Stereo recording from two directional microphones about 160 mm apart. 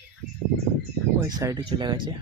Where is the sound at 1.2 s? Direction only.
20° right (ahead or behind).